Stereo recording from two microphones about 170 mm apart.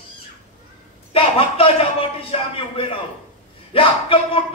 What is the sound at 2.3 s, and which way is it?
A man's voice, 35° left (ahead or behind).